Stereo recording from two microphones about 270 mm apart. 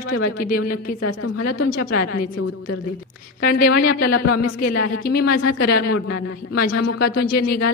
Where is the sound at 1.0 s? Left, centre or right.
Left.